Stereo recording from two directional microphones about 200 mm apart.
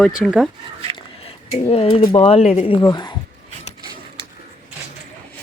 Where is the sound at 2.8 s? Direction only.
20° left (ahead or behind).